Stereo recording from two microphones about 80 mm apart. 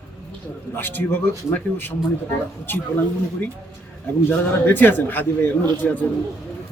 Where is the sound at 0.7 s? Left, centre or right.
Left.